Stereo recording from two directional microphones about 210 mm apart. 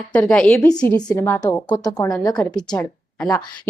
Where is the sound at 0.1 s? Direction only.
5° left (ahead or behind).